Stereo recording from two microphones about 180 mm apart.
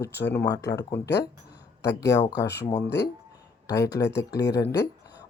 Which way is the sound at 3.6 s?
20° left (ahead or behind).